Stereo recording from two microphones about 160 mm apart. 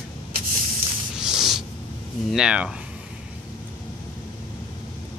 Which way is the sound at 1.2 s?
5° right (ahead or behind).